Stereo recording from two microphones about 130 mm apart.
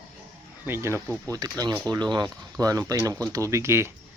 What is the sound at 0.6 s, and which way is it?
Speech, 20° right (ahead or behind).